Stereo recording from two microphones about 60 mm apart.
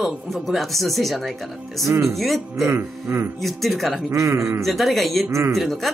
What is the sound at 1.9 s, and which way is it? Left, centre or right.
Speech, right.